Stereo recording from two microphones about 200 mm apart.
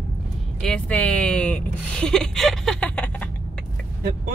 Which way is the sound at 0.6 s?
5° left (ahead or behind).